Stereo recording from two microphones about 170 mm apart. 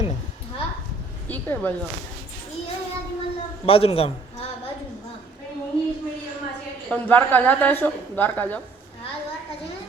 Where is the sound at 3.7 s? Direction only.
35° left (ahead or behind).